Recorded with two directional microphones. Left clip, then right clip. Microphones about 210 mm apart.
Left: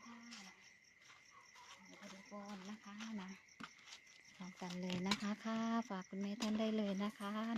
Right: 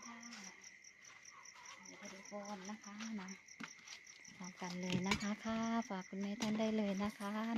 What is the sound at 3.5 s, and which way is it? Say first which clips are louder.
Cricket: right 3 dB; 20° left (ahead or behind).